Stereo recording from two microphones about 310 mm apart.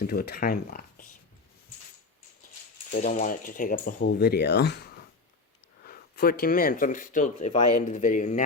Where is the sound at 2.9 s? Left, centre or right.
Left.